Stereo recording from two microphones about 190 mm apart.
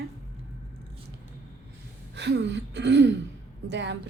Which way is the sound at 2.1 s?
65° right (ahead or behind).